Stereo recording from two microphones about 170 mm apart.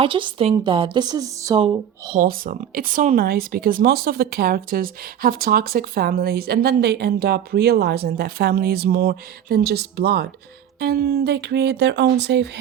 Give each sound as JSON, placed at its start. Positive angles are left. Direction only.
{"t": 0.0, "sound": "a woman's voice", "side_deg": -30}
{"t": 0.5, "sound": "a sound", "side_deg": -30}
{"t": 2.1, "sound": "speech", "side_deg": -55}
{"t": 3.2, "sound": "speech", "side_deg": -65}